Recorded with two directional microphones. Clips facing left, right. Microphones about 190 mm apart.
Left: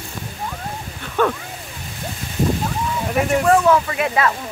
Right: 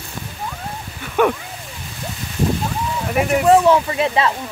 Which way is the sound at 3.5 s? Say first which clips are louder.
Right 4 dB; 25° right (ahead or behind).